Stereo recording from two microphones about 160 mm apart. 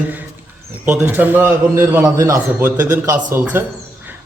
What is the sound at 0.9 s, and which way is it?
A man's voice, 10° right (ahead or behind).